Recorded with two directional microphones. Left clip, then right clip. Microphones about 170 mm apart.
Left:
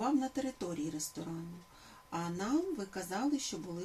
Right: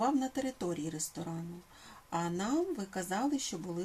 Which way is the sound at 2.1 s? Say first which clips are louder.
Right 2 dB; 65° right (ahead or behind).